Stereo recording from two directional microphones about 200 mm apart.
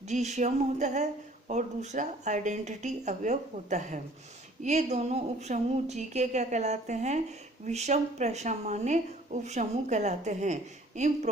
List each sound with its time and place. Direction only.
0.1 s a woman's voice: 35° right (ahead or behind)